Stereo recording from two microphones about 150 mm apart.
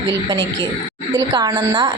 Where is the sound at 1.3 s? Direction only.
25° right (ahead or behind).